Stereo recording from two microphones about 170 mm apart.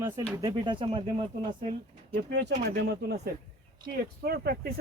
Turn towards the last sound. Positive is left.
turn(degrees=-65)  # may be behind; listen again after turning